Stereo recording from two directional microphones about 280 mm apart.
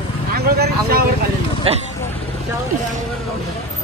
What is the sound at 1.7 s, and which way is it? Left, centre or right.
Speech, right.